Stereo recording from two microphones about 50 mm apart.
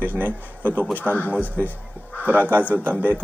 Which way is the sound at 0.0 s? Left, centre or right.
Right.